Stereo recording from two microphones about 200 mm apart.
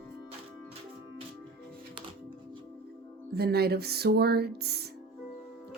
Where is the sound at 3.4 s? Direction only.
50° right (ahead or behind).